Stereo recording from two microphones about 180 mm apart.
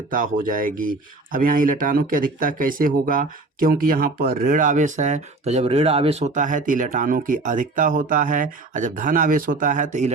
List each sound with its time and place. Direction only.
0.1 s speech: 50° right (ahead or behind)